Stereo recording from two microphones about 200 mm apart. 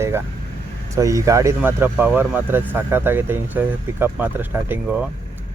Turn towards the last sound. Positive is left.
turn(degrees=-10)  # may be behind; listen again after turning